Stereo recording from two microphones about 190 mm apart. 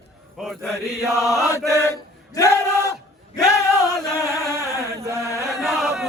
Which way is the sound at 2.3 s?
15° left (ahead or behind).